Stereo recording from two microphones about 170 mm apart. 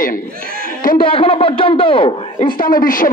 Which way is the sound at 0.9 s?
30° left (ahead or behind).